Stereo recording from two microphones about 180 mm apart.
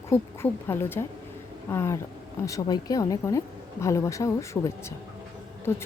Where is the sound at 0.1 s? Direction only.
15° left (ahead or behind).